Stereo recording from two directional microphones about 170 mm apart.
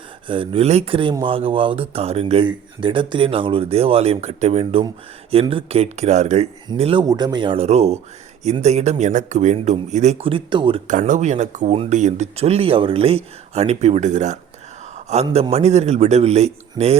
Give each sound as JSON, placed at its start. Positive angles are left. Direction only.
{"t": 0.3, "sound": "speech", "side_deg": -30}
{"t": 7.0, "sound": "speech", "side_deg": -25}
{"t": 10.8, "sound": "speech", "side_deg": -50}